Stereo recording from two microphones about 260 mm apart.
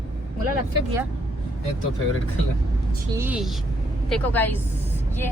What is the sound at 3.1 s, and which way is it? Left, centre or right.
A woman's voice, centre.